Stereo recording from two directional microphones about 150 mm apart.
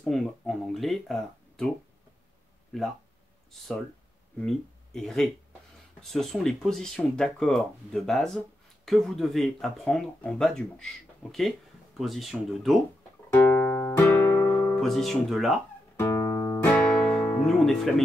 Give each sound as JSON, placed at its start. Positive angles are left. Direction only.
{"t": 0.0, "sound": "speech", "side_deg": 0}
{"t": 4.4, "sound": "speech", "side_deg": 5}
{"t": 13.3, "sound": "music", "side_deg": 10}
{"t": 14.5, "sound": "music", "side_deg": 25}
{"t": 14.8, "sound": "speech", "side_deg": 0}
{"t": 16.0, "sound": "music", "side_deg": 20}
{"t": 16.6, "sound": "guitar", "side_deg": 5}